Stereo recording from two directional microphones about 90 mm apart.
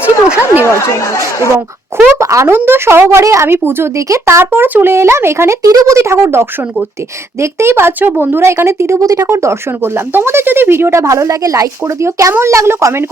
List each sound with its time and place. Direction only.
0.6 s speech: 35° left (ahead or behind)
2.1 s a woman's voice: 35° right (ahead or behind)